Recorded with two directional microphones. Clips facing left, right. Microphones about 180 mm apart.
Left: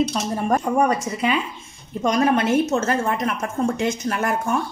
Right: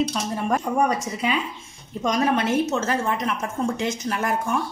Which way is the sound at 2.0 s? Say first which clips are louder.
Left 3 dB; 55° left (ahead or behind).